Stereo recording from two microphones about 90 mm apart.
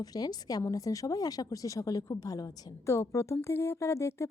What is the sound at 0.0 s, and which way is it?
Speech, 45° left (ahead or behind).